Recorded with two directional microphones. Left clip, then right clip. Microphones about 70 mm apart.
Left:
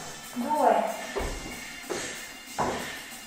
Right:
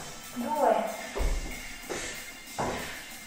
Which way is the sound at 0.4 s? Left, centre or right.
Centre.